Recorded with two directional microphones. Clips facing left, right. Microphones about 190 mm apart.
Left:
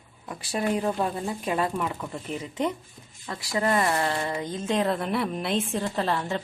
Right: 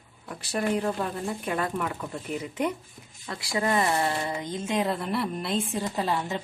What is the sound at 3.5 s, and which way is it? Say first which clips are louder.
A woman's voice: left 1 dB; 20° right (ahead or behind).